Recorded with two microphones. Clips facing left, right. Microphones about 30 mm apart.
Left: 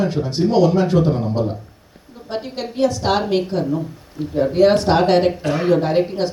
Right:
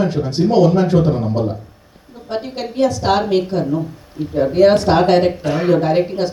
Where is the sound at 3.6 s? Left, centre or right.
Centre.